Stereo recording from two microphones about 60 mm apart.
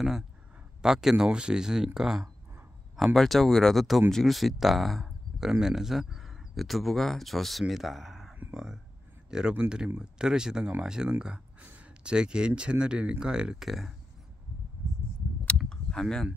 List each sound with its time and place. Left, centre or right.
0.8 s speech: centre
9.3 s speech: centre
15.5 s a sound: centre